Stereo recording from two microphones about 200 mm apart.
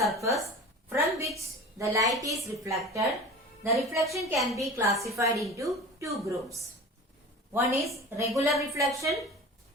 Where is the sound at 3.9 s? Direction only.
15° right (ahead or behind).